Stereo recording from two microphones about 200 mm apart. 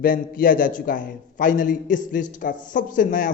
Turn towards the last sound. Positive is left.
turn(degrees=40)  # may be behind; listen again after turning